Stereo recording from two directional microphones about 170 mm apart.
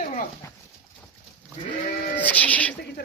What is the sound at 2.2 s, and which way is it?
Speech, 10° left (ahead or behind).